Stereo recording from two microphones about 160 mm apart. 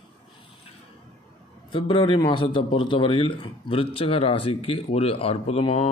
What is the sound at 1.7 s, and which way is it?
A man's voice, 30° left (ahead or behind).